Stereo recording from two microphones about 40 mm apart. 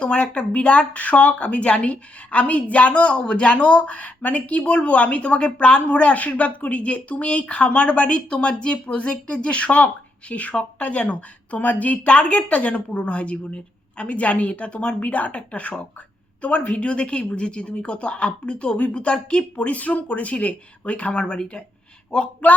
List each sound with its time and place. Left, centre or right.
0.0 s speech: left
12.0 s speech: left